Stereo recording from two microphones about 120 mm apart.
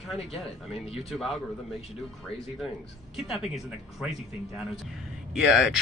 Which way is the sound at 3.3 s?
Centre (ahead or behind).